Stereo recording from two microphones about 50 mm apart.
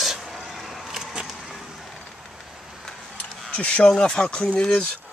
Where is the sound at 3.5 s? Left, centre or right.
Left.